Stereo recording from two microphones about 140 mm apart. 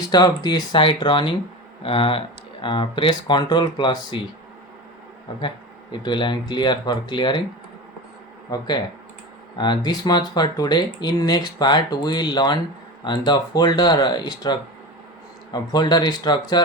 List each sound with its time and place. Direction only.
0.0 s speech: 30° left (ahead or behind)
5.3 s speech: 35° left (ahead or behind)
8.4 s speech: 30° left (ahead or behind)